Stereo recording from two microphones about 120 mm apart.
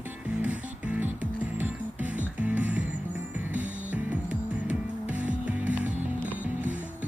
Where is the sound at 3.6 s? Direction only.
90° right.